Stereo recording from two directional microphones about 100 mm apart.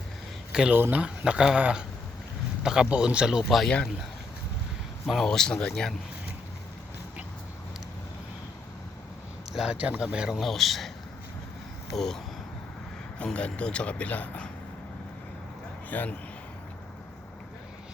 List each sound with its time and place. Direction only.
0.5 s speech: 10° right (ahead or behind)
5.0 s speech: centre (ahead or behind)
9.5 s speech: 5° right (ahead or behind)
11.9 s speech: 5° left (ahead or behind)
15.9 s speech: 15° left (ahead or behind)